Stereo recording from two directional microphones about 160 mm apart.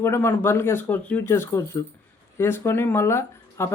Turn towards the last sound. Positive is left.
turn(degrees=15)  # may be behind; listen again after turning